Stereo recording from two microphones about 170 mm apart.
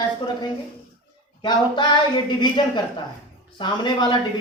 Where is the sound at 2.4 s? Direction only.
25° left (ahead or behind).